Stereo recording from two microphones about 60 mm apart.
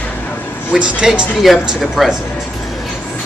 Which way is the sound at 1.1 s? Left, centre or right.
Centre.